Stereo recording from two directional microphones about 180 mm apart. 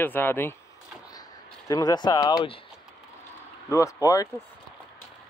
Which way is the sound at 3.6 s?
15° left (ahead or behind).